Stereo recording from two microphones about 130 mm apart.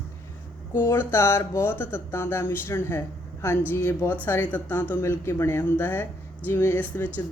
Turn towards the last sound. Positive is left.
turn(degrees=15)  # may be behind; listen again after turning